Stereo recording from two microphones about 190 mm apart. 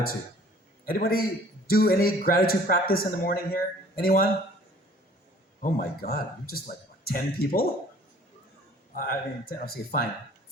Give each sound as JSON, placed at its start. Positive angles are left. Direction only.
{"t": 0.9, "sound": "speech", "side_deg": 50}
{"t": 5.6, "sound": "speech", "side_deg": 50}
{"t": 9.0, "sound": "speech", "side_deg": 50}